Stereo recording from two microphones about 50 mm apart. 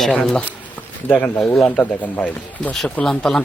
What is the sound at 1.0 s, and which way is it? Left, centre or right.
Speech, left.